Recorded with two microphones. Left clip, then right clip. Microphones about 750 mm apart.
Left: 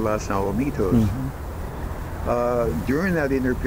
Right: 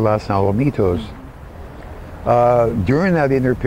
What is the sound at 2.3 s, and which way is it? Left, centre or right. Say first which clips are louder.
Speech: right 9 dB; right.